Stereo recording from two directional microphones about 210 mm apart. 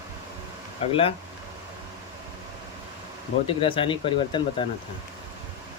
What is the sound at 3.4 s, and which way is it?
Speech, 25° left (ahead or behind).